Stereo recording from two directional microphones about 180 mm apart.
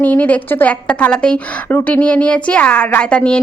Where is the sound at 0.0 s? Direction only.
10° left (ahead or behind).